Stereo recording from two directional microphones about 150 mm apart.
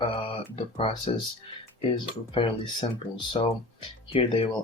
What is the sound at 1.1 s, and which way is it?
Speech, 45° left (ahead or behind).